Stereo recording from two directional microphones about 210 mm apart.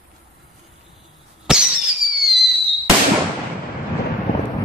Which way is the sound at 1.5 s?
5° right (ahead or behind).